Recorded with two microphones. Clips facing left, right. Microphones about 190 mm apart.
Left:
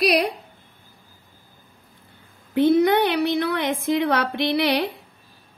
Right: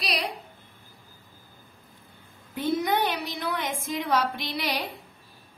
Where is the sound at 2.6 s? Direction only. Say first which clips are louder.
Left 9 dB; 65° left (ahead or behind).